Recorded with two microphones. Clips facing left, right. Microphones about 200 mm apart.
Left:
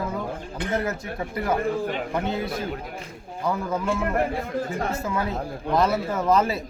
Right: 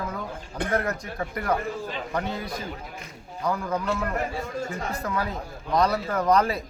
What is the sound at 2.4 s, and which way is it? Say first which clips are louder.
Speech: left 5 dB; 55° left (ahead or behind).